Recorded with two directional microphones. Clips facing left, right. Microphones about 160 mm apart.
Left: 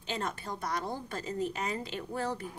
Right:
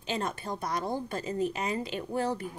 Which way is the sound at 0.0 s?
15° right (ahead or behind).